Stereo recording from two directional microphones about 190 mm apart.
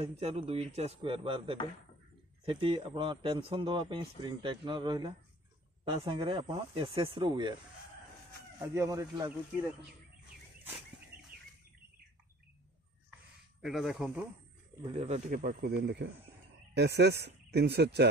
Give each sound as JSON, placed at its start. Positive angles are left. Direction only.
{"t": 0.0, "sound": "a man's voice", "side_deg": -30}
{"t": 8.5, "sound": "speech", "side_deg": -15}
{"t": 13.6, "sound": "speech", "side_deg": 0}
{"t": 14.9, "sound": "speech", "side_deg": -35}
{"t": 15.6, "sound": "speech", "side_deg": -60}